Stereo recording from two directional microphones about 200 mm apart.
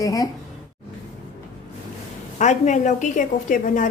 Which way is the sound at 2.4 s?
35° left (ahead or behind).